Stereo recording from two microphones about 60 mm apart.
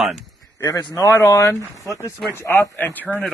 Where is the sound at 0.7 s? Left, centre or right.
Left.